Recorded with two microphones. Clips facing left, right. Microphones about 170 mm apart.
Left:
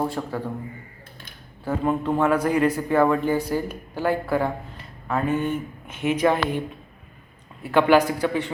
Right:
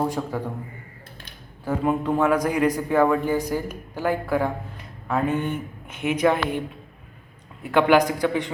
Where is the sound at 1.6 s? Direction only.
10° right (ahead or behind).